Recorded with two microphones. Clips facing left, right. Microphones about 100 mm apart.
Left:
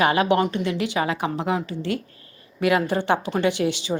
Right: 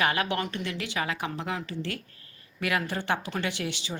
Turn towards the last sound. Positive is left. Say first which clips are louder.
# left 10 dB
turn(degrees=25)  # may be behind; listen again after turning